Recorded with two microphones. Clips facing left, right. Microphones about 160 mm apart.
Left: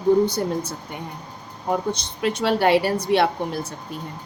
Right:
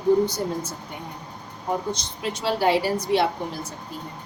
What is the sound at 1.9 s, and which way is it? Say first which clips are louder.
A woman's voice: left 5 dB; 60° left (ahead or behind).